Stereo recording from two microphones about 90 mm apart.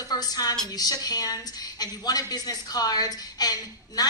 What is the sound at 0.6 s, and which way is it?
A woman's voice, 45° left (ahead or behind).